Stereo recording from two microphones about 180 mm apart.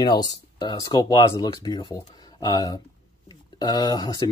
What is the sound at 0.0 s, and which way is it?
Speech, 25° left (ahead or behind).